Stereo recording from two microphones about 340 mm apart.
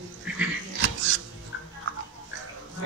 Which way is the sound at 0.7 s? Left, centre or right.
Right.